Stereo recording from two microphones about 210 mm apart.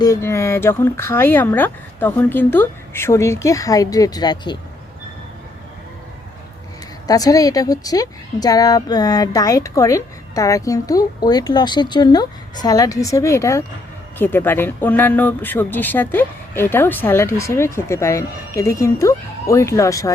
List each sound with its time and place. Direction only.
0.0 s a woman's voice: 15° left (ahead or behind)
7.1 s a woman's voice: 15° left (ahead or behind)